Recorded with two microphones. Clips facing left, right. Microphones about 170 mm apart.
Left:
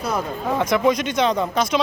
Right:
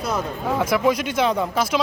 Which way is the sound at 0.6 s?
5° right (ahead or behind).